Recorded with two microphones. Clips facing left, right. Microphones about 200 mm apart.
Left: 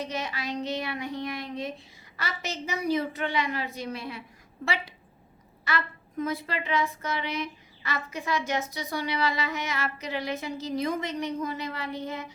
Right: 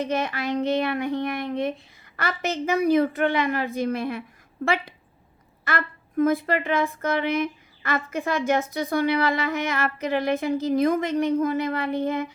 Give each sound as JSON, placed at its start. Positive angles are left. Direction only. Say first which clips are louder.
{"t": 0.0, "sound": "a woman's voice", "louder": "right 7 dB", "side_deg": -55}